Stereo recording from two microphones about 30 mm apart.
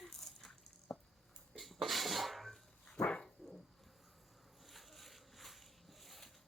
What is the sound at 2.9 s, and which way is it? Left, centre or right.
Dog, left.